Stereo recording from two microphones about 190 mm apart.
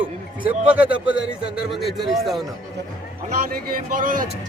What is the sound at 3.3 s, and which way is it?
A man's voice, 50° right (ahead or behind).